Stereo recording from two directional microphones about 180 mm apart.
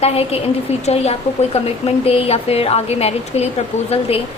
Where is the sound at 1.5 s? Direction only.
35° left (ahead or behind).